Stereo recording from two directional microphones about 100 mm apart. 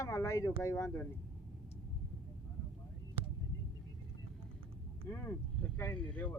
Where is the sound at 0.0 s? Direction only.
30° left (ahead or behind).